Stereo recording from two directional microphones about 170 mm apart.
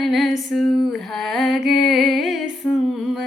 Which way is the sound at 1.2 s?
Centre (ahead or behind).